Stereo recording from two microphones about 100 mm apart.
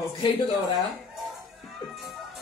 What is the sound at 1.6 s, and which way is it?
Music, centre (ahead or behind).